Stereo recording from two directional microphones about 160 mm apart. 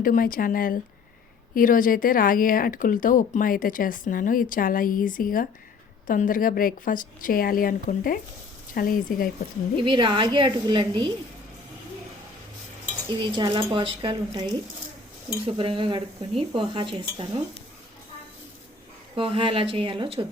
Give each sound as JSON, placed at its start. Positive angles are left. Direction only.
{"t": 0.0, "sound": "speech", "side_deg": 60}
{"t": 9.8, "sound": "speech", "side_deg": -30}
{"t": 13.1, "sound": "speech", "side_deg": -30}
{"t": 15.4, "sound": "speech", "side_deg": -35}
{"t": 19.1, "sound": "speech", "side_deg": -35}